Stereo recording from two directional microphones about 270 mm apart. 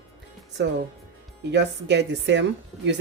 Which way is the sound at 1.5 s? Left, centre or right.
Right.